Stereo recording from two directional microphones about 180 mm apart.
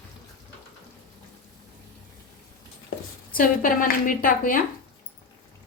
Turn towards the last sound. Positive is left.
turn(degrees=50)  # may be behind; listen again after turning